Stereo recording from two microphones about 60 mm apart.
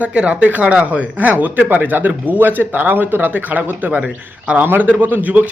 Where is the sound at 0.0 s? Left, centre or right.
Right.